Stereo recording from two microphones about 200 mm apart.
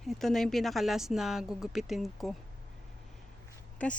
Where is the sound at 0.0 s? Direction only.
Centre (ahead or behind).